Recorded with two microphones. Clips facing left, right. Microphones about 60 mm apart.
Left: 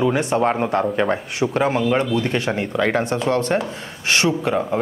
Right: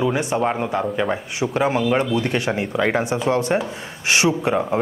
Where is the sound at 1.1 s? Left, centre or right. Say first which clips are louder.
Left 2 dB; centre.